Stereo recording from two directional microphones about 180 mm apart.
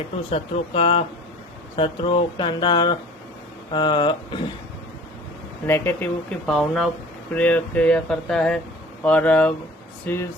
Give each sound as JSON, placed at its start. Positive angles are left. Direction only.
{"t": 0.3, "sound": "speech", "side_deg": 35}
{"t": 5.6, "sound": "speech", "side_deg": 15}